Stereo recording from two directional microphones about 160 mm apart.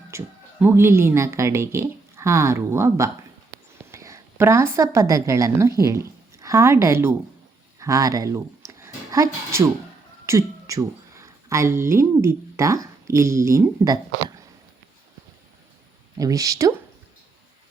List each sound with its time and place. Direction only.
0.1 s a woman's voice: 15° right (ahead or behind)
16.1 s speech: 20° right (ahead or behind)